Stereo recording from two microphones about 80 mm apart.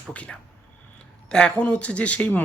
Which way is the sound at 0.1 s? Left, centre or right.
Centre.